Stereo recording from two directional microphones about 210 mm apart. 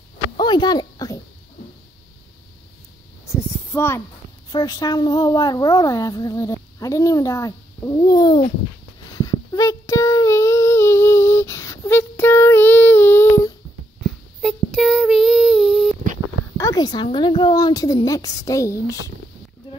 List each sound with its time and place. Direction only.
0.4 s speech: 20° left (ahead or behind)
3.3 s a sound: 10° left (ahead or behind)
4.5 s speech: 20° left (ahead or behind)
9.1 s child singing: 15° left (ahead or behind)
14.4 s child singing: centre (ahead or behind)
16.5 s a woman's voice: 15° left (ahead or behind)